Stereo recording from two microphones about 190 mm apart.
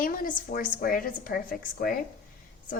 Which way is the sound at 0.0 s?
45° left (ahead or behind).